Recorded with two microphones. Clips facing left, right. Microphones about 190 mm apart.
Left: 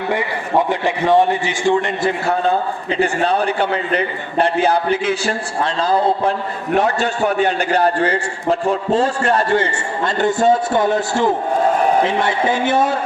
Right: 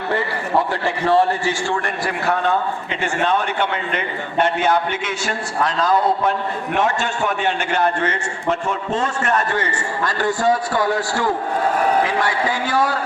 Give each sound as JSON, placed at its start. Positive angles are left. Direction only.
{"t": 0.7, "sound": "a man's voice", "side_deg": 20}